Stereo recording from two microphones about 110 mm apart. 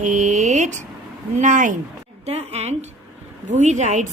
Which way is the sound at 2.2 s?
75° right (ahead or behind).